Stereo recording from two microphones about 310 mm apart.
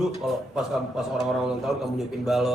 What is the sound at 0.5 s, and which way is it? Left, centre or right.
A man's voice, centre.